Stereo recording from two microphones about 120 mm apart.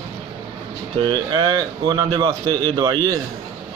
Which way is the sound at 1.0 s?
40° right (ahead or behind).